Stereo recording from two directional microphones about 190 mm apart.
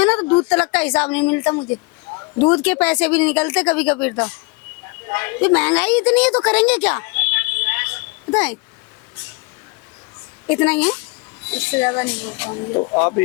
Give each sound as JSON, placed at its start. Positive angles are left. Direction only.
{"t": 0.4, "sound": "a woman's voice", "side_deg": 5}
{"t": 10.5, "sound": "speech", "side_deg": 5}
{"t": 12.5, "sound": "speech", "side_deg": 25}
{"t": 13.0, "sound": "speech", "side_deg": 10}